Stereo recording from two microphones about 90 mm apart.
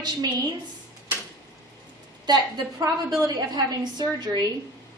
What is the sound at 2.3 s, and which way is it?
A woman's voice, 55° right (ahead or behind).